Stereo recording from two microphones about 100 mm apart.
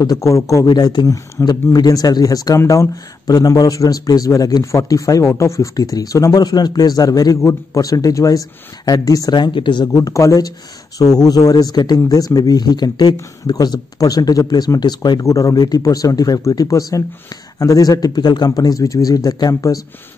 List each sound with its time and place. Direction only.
0.0 s speech: 45° left (ahead or behind)
1.4 s a man's voice: 45° left (ahead or behind)
9.9 s a man's voice: 35° left (ahead or behind)